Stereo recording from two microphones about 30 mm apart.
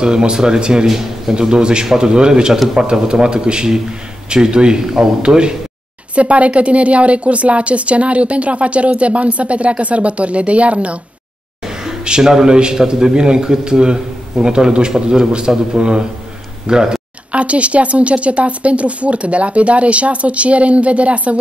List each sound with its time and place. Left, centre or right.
0.0 s a man's voice: right
0.8 s a man's voice: centre
1.4 s a man's voice: right
6.1 s a woman's voice: right
11.6 s a sound: right
12.2 s a man's voice: right
17.3 s a woman's voice: right